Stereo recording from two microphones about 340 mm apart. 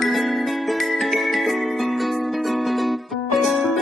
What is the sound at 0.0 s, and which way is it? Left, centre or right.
Music, centre.